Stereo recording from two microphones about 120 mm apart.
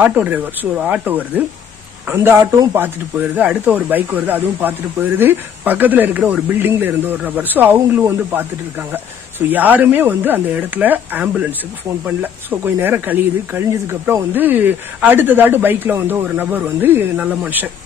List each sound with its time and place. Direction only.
0.0 s speech: 15° right (ahead or behind)
9.5 s speech: 15° right (ahead or behind)